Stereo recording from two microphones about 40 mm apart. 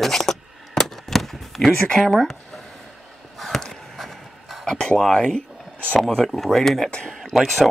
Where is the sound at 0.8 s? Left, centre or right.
Centre.